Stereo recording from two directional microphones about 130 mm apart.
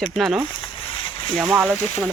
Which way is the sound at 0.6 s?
40° left (ahead or behind).